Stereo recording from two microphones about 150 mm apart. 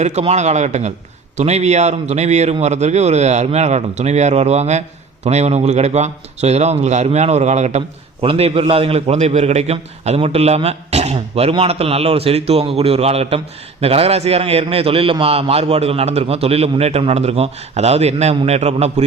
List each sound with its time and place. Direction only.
0.0 s a man's voice: 45° right (ahead or behind)